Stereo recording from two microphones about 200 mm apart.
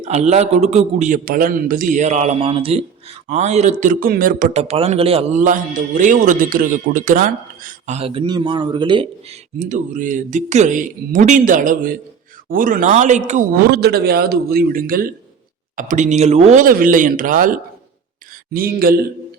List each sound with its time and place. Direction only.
0.0 s a man's voice: 35° right (ahead or behind)
9.6 s a man's voice: 35° right (ahead or behind)